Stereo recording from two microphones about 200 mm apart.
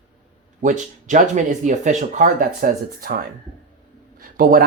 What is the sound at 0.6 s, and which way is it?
Speech, 40° right (ahead or behind).